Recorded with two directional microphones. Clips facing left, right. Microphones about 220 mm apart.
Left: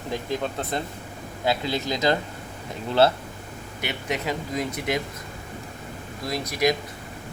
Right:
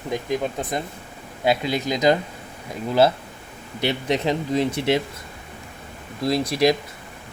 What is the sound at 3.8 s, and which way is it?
Speech, 35° right (ahead or behind).